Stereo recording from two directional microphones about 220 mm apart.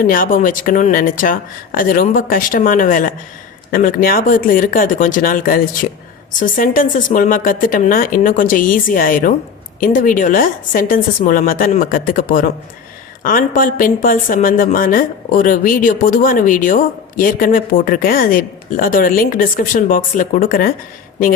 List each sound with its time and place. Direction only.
0.1 s a woman's voice: 40° left (ahead or behind)